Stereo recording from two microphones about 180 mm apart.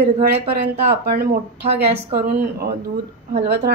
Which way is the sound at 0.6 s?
60° right (ahead or behind).